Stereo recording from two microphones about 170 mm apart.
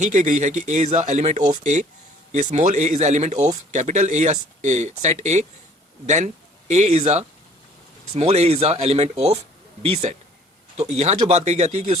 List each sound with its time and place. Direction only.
0.0 s speech: 45° right (ahead or behind)